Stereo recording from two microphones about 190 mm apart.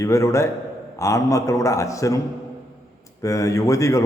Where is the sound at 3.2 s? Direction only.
15° left (ahead or behind).